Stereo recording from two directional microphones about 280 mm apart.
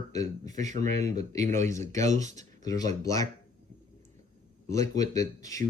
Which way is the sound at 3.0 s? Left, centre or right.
Centre.